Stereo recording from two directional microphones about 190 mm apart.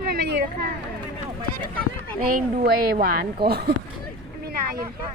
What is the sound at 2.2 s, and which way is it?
Speech, 50° right (ahead or behind).